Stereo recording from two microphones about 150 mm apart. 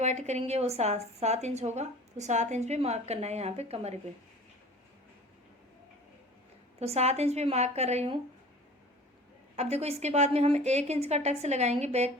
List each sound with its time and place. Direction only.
0.0 s a woman's voice: 50° right (ahead or behind)
6.7 s a woman's voice: 45° right (ahead or behind)
9.6 s a woman's voice: 45° right (ahead or behind)